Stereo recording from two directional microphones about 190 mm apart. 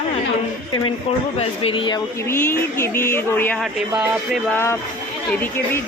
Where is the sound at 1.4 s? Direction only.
30° left (ahead or behind); by 3.5 s 10° left (ahead or behind).